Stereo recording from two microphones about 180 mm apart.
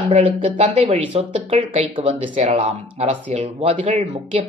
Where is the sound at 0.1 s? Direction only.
30° right (ahead or behind).